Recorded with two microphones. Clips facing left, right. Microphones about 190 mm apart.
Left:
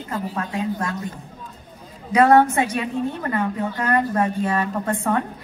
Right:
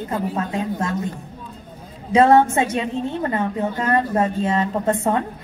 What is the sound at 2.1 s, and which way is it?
A woman's voice, 25° right (ahead or behind).